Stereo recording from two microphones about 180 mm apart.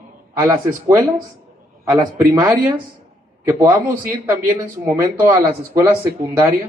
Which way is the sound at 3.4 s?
15° right (ahead or behind).